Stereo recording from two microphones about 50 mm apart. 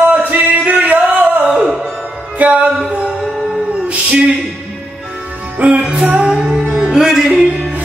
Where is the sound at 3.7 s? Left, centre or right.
Right.